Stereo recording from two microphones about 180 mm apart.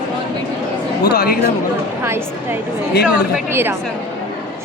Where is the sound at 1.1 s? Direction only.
60° left (ahead or behind).